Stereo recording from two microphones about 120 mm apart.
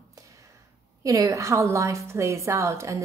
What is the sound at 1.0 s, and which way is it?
A woman's voice, 30° right (ahead or behind).